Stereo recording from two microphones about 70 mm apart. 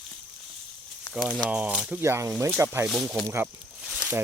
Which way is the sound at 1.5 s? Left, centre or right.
Centre.